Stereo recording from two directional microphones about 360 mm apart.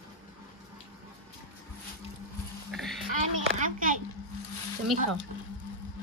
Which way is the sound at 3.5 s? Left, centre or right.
Right.